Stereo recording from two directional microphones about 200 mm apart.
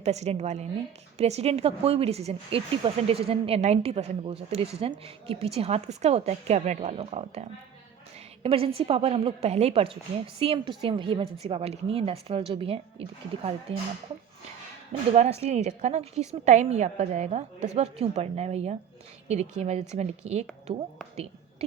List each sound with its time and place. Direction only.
0.0 s a woman's voice: 35° right (ahead or behind)
15.1 s speech: 30° right (ahead or behind)